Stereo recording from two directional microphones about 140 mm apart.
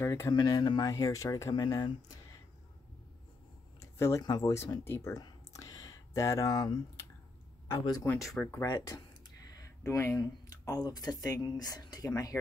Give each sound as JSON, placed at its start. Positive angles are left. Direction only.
{"t": 0.0, "sound": "speech", "side_deg": 20}
{"t": 0.3, "sound": "speech", "side_deg": 30}
{"t": 3.8, "sound": "speech", "side_deg": 20}
{"t": 8.2, "sound": "speech", "side_deg": 0}
{"t": 8.6, "sound": "speech", "side_deg": 25}